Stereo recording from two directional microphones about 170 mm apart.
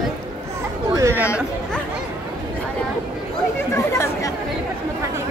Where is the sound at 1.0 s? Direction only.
15° right (ahead or behind).